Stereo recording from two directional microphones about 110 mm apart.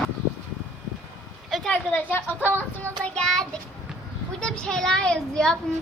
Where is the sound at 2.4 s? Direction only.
20° right (ahead or behind).